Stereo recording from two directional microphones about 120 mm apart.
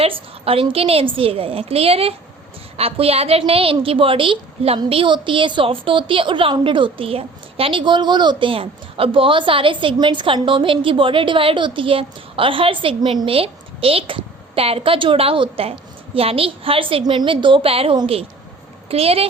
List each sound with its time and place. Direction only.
0.0 s a woman's voice: 50° right (ahead or behind)